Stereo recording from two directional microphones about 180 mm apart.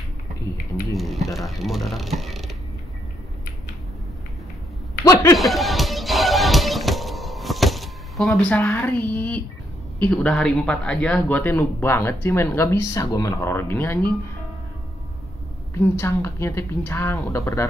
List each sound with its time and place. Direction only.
0.9 s speech: centre (ahead or behind)
5.0 s a sound: 20° left (ahead or behind)
5.4 s music: centre (ahead or behind)
9.9 s a man's voice: 5° left (ahead or behind)
16.0 s a man's voice: 15° left (ahead or behind)